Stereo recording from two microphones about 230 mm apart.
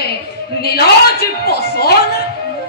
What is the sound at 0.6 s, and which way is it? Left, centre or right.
Music, left.